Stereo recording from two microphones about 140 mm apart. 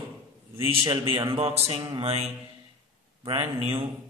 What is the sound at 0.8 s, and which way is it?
A man's voice, 35° right (ahead or behind).